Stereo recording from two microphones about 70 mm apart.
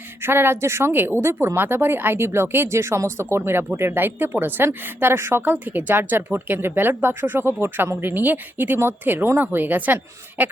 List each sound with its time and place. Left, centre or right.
0.2 s a woman's voice: right